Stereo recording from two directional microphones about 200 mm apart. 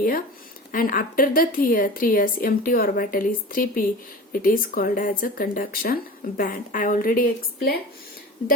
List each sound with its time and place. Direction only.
0.7 s speech: 45° left (ahead or behind)